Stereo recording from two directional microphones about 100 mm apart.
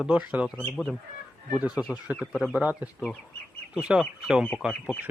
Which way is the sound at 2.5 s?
15° right (ahead or behind).